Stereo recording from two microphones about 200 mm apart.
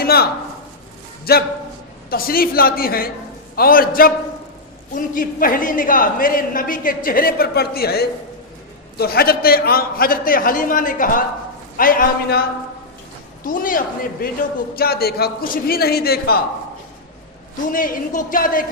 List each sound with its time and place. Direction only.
0.0 s a sound: 50° left (ahead or behind)
1.2 s a man's voice: 50° left (ahead or behind)
17.7 s speech: 45° left (ahead or behind)